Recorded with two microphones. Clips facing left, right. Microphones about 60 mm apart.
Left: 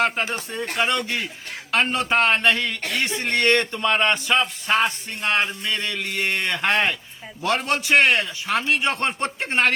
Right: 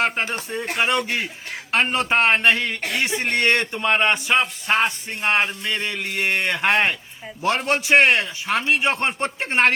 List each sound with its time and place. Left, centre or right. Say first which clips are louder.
0.0 s speech: even; right
0.5 s speech: right 2 dB; centre
0.8 s a man's voice: right 1 dB; centre
2.8 s a man's voice: right 2 dB; centre
3.3 s a man's voice: left 2 dB; right